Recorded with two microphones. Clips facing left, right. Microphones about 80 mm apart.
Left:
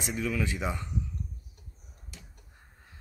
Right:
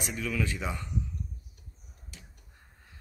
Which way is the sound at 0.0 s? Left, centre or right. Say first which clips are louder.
Left 1 dB; left.